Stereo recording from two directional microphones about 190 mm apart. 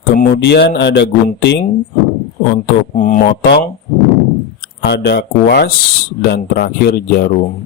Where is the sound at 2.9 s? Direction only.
40° left (ahead or behind).